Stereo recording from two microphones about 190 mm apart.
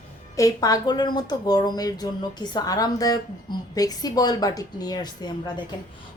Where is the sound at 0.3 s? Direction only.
20° left (ahead or behind).